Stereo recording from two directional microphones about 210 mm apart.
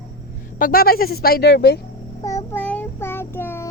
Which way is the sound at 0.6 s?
45° left (ahead or behind).